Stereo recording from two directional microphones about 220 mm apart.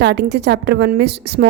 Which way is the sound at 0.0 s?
50° right (ahead or behind).